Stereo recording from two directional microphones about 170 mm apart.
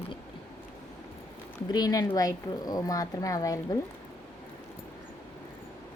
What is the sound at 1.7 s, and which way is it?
A woman's voice, 20° left (ahead or behind).